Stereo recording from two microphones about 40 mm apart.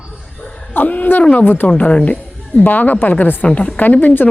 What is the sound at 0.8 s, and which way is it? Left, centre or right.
Speech, left.